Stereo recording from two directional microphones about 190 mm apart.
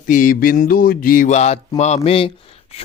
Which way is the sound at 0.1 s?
45° left (ahead or behind).